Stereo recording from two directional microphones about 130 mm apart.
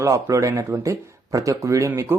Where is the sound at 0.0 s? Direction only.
25° right (ahead or behind).